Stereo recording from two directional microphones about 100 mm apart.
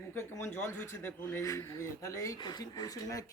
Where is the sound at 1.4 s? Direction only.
35° left (ahead or behind).